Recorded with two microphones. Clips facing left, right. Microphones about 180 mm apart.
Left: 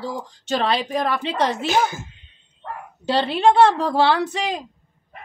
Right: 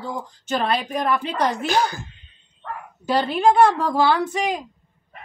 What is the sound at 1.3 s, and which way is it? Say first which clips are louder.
Speech: left 1 dB; 25° left (ahead or behind).